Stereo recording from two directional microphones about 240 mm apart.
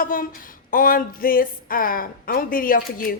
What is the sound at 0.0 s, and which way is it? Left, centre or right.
A woman's voice, left.